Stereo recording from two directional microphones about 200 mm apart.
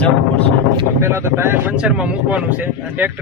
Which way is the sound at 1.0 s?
15° right (ahead or behind).